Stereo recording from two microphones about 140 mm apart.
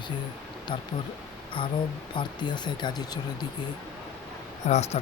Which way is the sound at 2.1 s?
30° left (ahead or behind).